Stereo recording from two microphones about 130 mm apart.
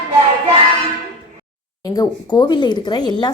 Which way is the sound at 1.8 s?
30° left (ahead or behind).